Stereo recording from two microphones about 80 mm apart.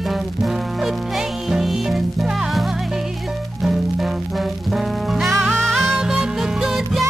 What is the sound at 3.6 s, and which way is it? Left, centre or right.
Music, centre.